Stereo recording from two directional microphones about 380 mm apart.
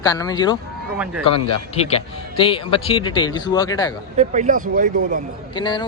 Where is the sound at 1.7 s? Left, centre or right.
Centre.